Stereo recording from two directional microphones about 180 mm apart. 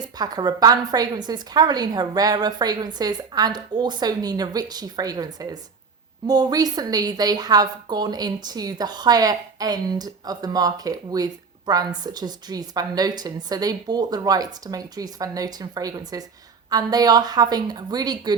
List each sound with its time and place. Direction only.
0.2 s a woman's voice: 20° right (ahead or behind)